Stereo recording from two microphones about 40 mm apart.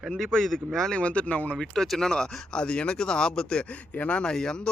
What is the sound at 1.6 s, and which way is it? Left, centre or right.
A man's voice, centre.